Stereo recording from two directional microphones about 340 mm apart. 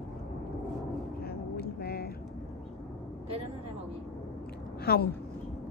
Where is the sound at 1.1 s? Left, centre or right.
Left.